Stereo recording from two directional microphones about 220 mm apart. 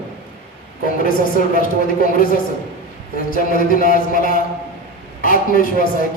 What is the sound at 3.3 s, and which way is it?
A man's voice, 40° left (ahead or behind).